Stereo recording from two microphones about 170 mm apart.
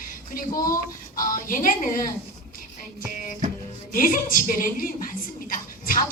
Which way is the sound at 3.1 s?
50° left (ahead or behind).